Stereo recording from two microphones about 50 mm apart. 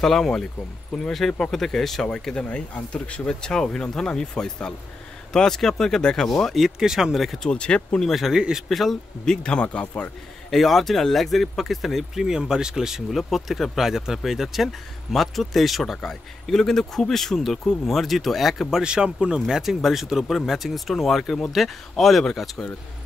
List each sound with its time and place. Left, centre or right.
0.0 s speech: centre
2.0 s speech: centre
6.6 s speech: centre
7.4 s speech: centre
8.0 s speech: centre
8.4 s speech: centre
8.6 s speech: centre
9.2 s speech: centre
10.5 s speech: centre
18.8 s speech: centre